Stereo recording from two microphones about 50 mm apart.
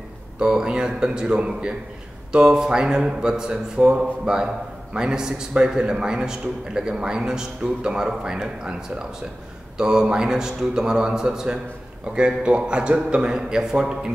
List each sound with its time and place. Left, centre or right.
0.4 s a man's voice: centre